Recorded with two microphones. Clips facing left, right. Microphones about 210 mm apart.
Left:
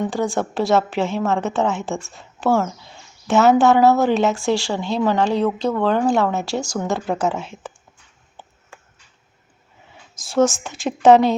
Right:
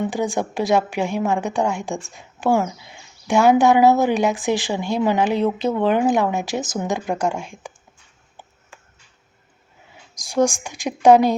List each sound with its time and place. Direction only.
0.1 s speech: 15° right (ahead or behind)
10.2 s speech: 15° right (ahead or behind)